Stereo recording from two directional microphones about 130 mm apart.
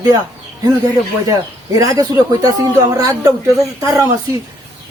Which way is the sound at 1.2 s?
25° right (ahead or behind).